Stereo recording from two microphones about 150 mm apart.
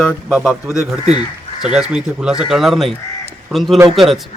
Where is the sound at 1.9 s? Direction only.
5° right (ahead or behind).